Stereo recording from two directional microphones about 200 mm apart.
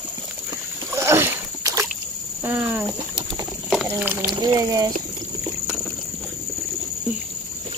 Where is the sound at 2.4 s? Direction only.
10° right (ahead or behind).